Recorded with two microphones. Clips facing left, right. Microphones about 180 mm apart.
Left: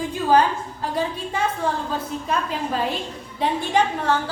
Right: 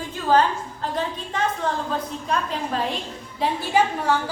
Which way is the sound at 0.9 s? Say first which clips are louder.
Left 3 dB; 10° left (ahead or behind).